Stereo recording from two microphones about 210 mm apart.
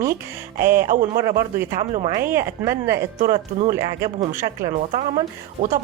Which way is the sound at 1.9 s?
30° right (ahead or behind).